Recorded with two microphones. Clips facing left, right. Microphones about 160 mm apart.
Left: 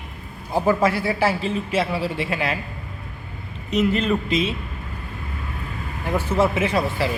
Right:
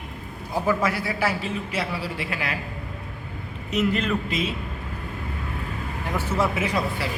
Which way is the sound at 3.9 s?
30° left (ahead or behind).